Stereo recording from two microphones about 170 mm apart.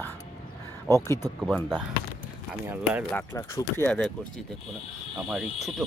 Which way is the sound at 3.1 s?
15° left (ahead or behind).